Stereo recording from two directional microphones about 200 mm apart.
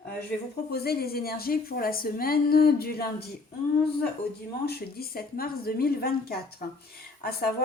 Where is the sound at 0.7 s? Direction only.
50° left (ahead or behind).